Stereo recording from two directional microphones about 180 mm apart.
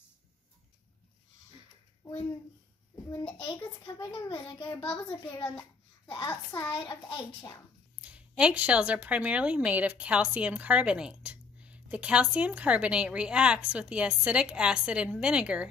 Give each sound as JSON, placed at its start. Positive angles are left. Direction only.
{"t": 3.0, "sound": "a child's voice", "side_deg": 10}
{"t": 3.3, "sound": "a child's voice", "side_deg": 20}
{"t": 8.0, "sound": "speech", "side_deg": -5}